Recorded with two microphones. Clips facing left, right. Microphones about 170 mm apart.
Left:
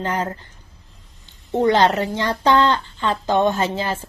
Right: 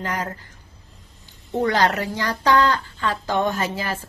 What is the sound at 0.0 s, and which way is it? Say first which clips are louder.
Speech: left 4 dB; 25° left (ahead or behind).